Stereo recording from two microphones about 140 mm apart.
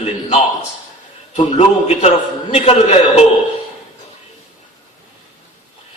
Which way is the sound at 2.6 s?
45° left (ahead or behind).